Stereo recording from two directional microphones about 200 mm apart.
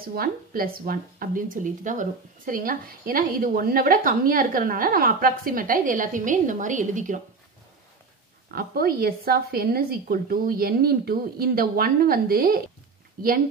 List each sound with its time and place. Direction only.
0.1 s speech: 50° right (ahead or behind)
8.5 s speech: 50° right (ahead or behind)